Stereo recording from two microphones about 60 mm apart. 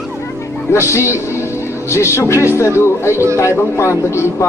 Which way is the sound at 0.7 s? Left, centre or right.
Left.